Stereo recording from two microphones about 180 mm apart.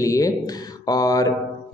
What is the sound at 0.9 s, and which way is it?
Mantra, 20° left (ahead or behind).